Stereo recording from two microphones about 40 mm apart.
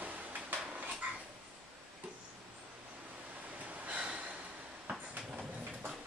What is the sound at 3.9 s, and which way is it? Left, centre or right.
Gasp, right.